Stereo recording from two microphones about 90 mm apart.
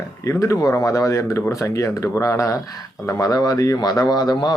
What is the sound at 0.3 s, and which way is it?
Speech, 35° left (ahead or behind).